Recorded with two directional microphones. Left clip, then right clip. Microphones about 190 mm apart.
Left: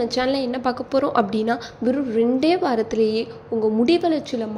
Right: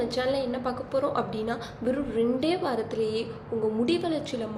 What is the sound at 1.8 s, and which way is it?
A woman's voice, 25° left (ahead or behind).